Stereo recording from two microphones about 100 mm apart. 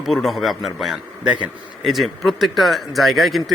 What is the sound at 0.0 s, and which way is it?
Speech, centre (ahead or behind).